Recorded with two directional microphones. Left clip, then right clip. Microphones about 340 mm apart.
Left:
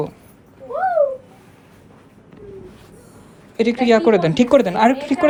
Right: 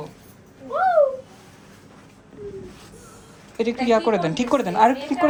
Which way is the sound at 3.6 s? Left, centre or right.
Left.